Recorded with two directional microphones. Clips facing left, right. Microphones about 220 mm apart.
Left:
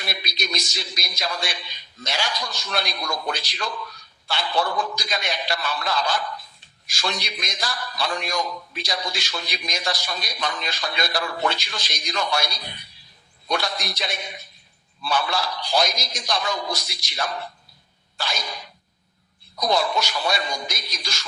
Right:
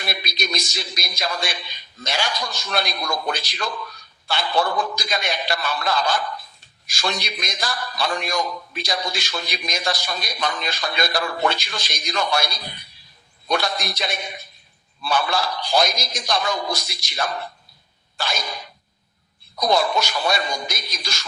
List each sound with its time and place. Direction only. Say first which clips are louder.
0.0 s a man's voice: right 3 dB; 50° right (ahead or behind)
18.2 s a sound: right 3 dB; 50° right (ahead or behind)
19.5 s a man's voice: right 2 dB; 50° right (ahead or behind)